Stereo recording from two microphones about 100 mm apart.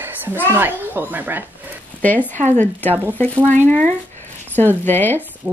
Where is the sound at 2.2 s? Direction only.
20° left (ahead or behind).